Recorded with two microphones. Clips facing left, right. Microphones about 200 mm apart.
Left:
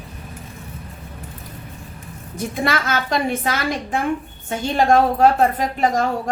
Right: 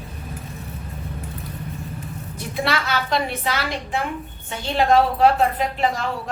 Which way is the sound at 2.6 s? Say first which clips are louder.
Left 1 dB; 45° left (ahead or behind).